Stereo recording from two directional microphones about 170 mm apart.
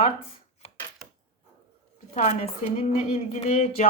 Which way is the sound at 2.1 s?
45° left (ahead or behind).